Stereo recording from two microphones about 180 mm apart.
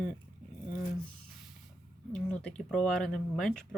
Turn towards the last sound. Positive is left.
turn(degrees=5)  # may be behind; listen again after turning